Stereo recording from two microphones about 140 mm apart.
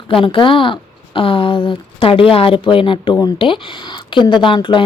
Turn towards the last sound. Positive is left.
turn(degrees=35)  # may be behind; listen again after turning